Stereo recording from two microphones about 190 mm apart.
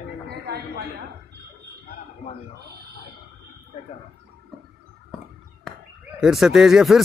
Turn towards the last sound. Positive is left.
turn(degrees=0)  # may be behind; listen again after turning